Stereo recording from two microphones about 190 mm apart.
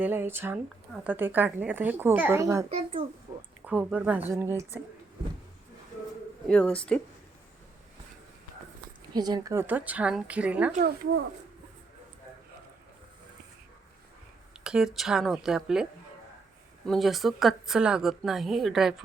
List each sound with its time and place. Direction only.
0.0 s a woman's voice: 10° right (ahead or behind)
2.6 s a child's voice: 30° right (ahead or behind)
3.7 s a woman's voice: 5° right (ahead or behind)
6.5 s speech: 5° left (ahead or behind)
9.1 s a woman's voice: 20° right (ahead or behind)
10.8 s speech: 55° right (ahead or behind)
14.5 s speech: 5° right (ahead or behind)